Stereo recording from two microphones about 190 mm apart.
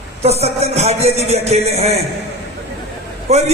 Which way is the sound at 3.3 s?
35° right (ahead or behind).